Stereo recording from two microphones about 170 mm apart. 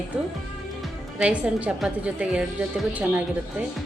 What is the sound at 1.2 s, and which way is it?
A woman's voice, 5° right (ahead or behind).